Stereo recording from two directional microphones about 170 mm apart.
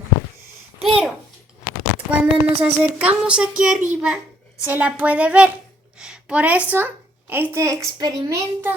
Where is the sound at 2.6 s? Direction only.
10° right (ahead or behind).